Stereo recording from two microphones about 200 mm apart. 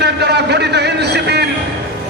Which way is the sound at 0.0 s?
55° right (ahead or behind).